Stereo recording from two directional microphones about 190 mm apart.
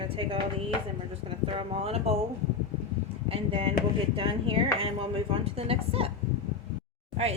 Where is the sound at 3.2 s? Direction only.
30° right (ahead or behind).